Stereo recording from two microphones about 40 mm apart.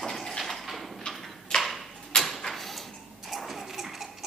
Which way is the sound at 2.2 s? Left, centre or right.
Centre.